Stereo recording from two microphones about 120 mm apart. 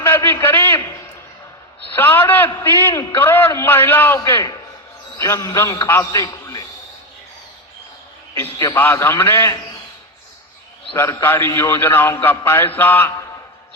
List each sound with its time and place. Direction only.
0.0 s a sound: 20° left (ahead or behind)
2.0 s mantra: 15° left (ahead or behind)
2.6 s a man's voice: 20° left (ahead or behind)
8.4 s a man's voice: 25° left (ahead or behind)
11.2 s a man's voice: 20° left (ahead or behind)
12.4 s mantra: 20° left (ahead or behind)